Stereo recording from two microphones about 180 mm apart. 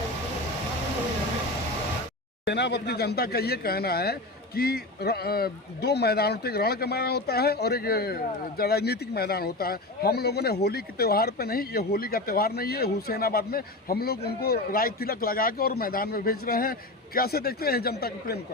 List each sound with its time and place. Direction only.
2.4 s speech: 70° left (ahead or behind)